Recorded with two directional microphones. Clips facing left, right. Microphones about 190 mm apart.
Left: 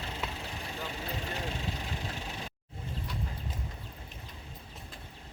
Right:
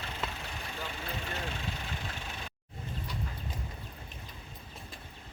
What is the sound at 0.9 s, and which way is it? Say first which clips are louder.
Vehicle: left 2 dB; 35° left (ahead or behind).